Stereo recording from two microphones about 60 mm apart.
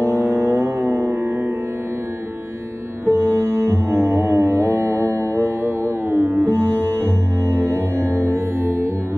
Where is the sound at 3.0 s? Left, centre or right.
Right.